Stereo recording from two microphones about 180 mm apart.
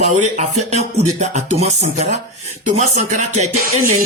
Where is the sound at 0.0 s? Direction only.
40° right (ahead or behind).